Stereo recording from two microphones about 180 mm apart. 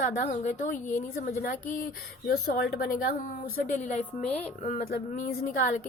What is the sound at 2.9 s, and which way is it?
Speech, 50° left (ahead or behind).